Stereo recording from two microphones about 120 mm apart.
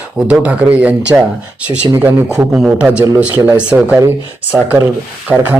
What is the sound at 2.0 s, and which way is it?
Speech, 5° right (ahead or behind).